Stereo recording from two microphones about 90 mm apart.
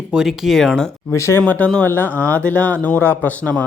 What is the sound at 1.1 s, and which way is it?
Speech, 35° left (ahead or behind).